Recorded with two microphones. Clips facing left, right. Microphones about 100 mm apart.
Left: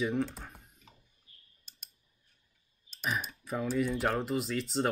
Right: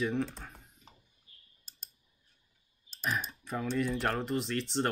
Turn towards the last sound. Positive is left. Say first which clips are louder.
# left 1 dB
turn(degrees=5)  # may be behind; listen again after turning